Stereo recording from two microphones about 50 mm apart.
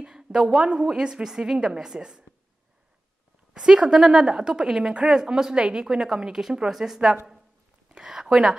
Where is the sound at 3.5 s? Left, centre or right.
Centre.